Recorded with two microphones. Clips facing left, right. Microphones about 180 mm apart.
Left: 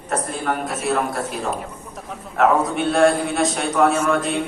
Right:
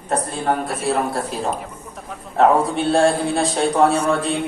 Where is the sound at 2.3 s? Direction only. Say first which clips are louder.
Right 2 dB; 30° right (ahead or behind).